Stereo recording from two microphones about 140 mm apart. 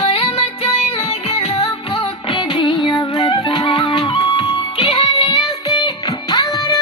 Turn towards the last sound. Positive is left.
turn(degrees=30)  # may be behind; listen again after turning